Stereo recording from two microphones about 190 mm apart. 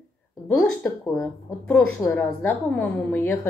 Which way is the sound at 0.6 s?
5° left (ahead or behind).